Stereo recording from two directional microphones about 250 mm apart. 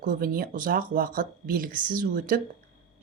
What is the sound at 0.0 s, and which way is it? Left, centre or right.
Speech, right.